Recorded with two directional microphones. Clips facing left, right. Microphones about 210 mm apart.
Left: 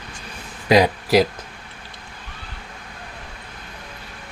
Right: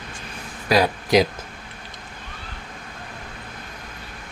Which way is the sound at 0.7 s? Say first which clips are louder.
Left 4 dB; 20° left (ahead or behind).